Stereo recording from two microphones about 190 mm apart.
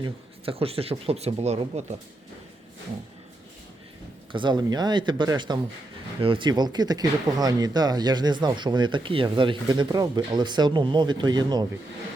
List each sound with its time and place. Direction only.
0.0 s speech: 30° right (ahead or behind)
4.3 s speech: 25° right (ahead or behind)